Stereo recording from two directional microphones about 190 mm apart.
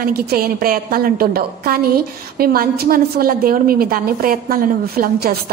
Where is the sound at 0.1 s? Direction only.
50° right (ahead or behind).